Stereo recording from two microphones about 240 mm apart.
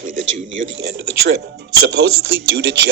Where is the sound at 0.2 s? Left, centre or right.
Right.